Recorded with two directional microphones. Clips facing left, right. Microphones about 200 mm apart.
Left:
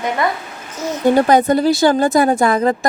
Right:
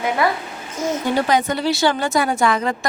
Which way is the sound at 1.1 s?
50° left (ahead or behind).